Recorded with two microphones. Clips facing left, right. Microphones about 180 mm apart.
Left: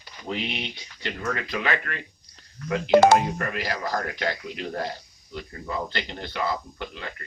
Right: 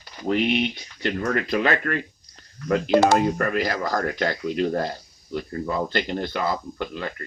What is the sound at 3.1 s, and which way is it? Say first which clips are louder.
Speech: right 2 dB; 45° right (ahead or behind).